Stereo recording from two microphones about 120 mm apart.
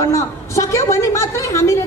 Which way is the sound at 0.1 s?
25° left (ahead or behind).